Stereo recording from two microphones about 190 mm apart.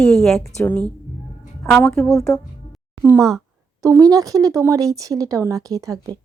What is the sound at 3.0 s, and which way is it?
A woman's voice, 15° right (ahead or behind).